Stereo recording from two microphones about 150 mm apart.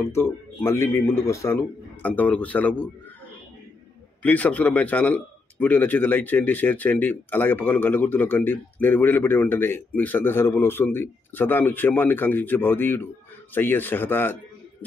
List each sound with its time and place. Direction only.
0.0 s a man's voice: 15° left (ahead or behind)
4.2 s a man's voice: 10° left (ahead or behind)